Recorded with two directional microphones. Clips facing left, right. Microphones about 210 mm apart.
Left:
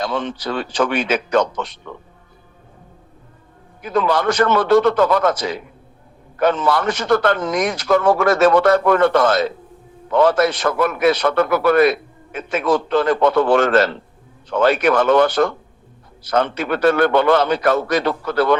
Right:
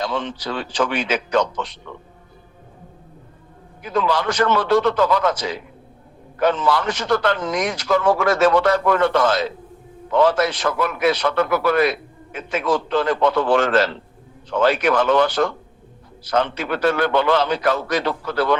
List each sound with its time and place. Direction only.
0.0 s a man's voice: 50° left (ahead or behind)
3.8 s a man's voice: 55° left (ahead or behind)